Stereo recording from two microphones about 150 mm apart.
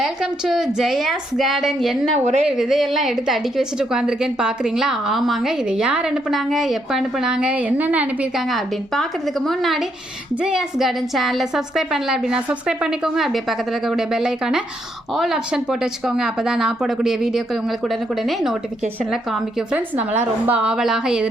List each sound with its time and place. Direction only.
0.0 s a woman's voice: centre (ahead or behind)
2.1 s a woman's voice: 50° right (ahead or behind)
2.4 s a woman's voice: centre (ahead or behind)
8.4 s a woman's voice: centre (ahead or behind)